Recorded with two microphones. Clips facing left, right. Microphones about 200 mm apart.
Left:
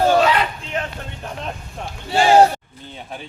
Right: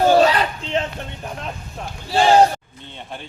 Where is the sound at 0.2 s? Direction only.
35° right (ahead or behind).